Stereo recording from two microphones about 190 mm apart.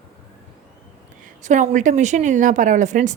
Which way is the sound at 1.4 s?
40° right (ahead or behind).